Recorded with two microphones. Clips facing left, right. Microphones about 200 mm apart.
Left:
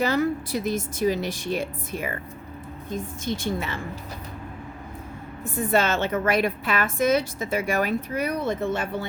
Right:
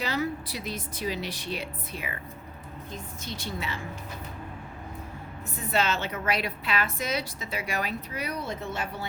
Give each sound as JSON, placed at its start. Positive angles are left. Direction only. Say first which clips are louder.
{"t": 0.0, "sound": "a woman's voice", "louder": "left 7 dB", "side_deg": 50}
{"t": 5.5, "sound": "a woman's voice", "louder": "left 6 dB", "side_deg": 50}